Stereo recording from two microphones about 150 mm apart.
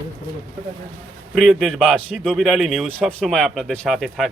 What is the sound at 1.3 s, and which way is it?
Speech, centre (ahead or behind).